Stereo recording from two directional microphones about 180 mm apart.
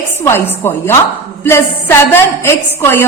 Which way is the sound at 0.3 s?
15° left (ahead or behind).